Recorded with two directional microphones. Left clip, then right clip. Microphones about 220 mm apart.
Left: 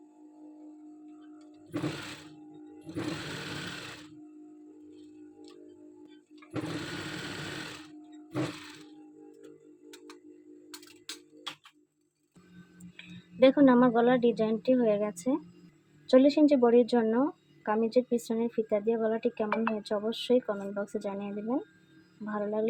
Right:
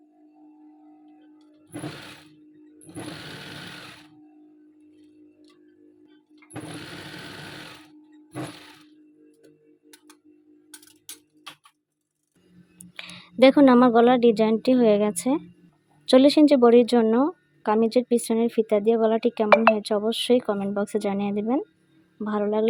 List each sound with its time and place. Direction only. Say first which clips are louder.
13.0 s a woman's voice: right 6 dB; 45° right (ahead or behind)